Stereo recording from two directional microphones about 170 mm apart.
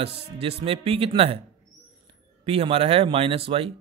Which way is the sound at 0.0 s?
35° right (ahead or behind).